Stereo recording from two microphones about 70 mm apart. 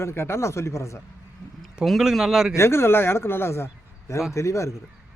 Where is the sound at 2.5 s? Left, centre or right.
Left.